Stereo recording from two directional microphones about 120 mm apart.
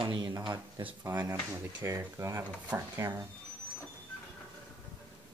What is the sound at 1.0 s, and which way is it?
Speech, 20° right (ahead or behind).